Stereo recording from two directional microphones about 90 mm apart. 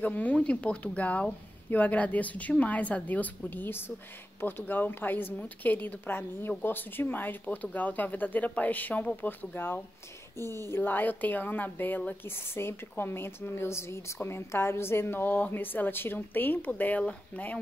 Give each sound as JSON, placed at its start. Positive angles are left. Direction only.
{"t": 0.0, "sound": "speech", "side_deg": 15}